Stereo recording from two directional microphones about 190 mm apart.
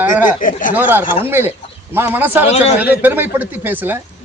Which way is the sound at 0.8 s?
10° right (ahead or behind).